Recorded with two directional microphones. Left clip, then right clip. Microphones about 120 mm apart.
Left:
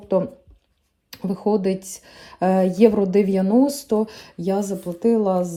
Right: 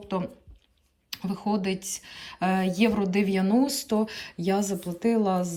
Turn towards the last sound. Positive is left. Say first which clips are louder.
# left 6 dB
turn(degrees=45)  # may be behind; listen again after turning